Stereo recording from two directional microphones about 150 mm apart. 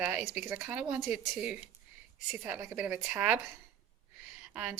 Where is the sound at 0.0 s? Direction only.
5° right (ahead or behind).